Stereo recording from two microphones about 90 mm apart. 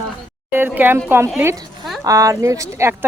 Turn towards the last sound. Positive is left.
turn(degrees=-30)  # may be behind; listen again after turning